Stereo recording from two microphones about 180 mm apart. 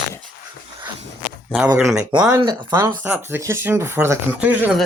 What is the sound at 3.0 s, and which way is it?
Speech, 10° right (ahead or behind).